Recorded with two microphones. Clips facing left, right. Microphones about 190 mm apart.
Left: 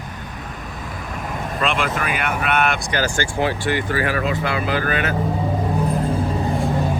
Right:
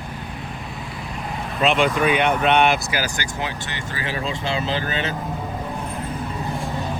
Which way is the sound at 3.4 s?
20° right (ahead or behind).